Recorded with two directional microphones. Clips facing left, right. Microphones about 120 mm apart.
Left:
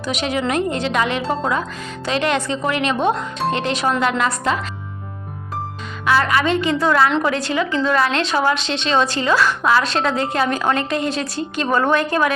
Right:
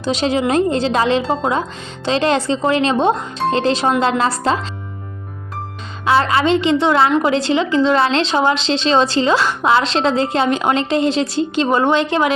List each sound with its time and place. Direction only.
0.0 s a woman's voice: 30° right (ahead or behind)
6.1 s a woman's voice: 25° right (ahead or behind)
7.1 s a woman's voice: 15° right (ahead or behind)
7.3 s a woman's voice: 25° right (ahead or behind)